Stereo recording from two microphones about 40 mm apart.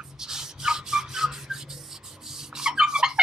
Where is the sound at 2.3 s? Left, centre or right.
Centre.